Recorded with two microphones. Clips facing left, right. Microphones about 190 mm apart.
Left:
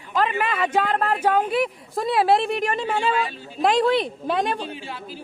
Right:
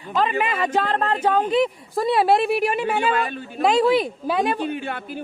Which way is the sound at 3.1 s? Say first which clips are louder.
Right 1 dB; 55° right (ahead or behind).